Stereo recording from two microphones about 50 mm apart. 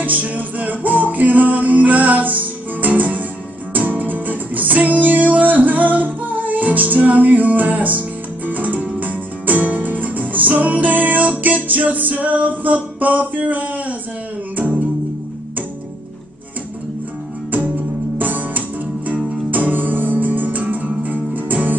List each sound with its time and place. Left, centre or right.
0.0 s music: right
18.1 s music: right